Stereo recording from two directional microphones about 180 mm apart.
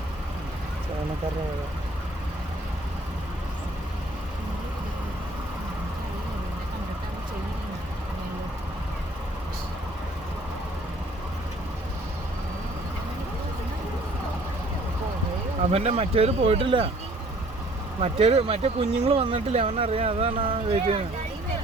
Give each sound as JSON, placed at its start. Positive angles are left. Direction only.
{"t": 15.7, "sound": "speech", "side_deg": -35}
{"t": 18.0, "sound": "speech", "side_deg": -35}